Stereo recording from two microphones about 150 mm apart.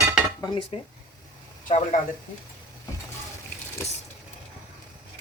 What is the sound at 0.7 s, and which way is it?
Speech, 40° left (ahead or behind).